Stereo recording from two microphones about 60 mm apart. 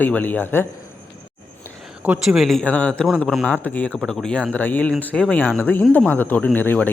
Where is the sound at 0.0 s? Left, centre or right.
Left.